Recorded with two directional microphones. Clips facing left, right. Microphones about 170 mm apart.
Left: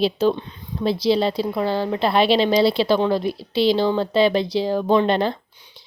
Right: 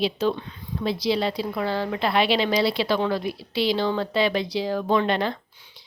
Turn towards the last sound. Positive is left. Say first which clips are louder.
# left 4 dB
turn(degrees=30)  # may be behind; listen again after turning